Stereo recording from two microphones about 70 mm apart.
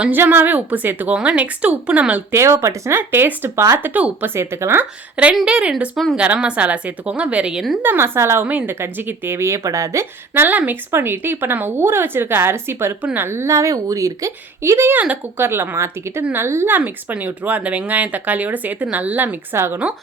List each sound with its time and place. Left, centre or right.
0.1 s speech: right
2.3 s a woman's voice: right
3.1 s speech: right
4.4 s speech: right
5.1 s a woman's voice: centre
7.8 s speech: right
8.4 s speech: right
10.7 s a woman's voice: right
19.5 s speech: right